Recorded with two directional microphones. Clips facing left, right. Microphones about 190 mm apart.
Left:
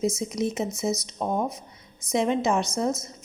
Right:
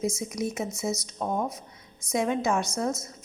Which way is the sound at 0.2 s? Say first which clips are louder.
Left 3 dB; 25° left (ahead or behind).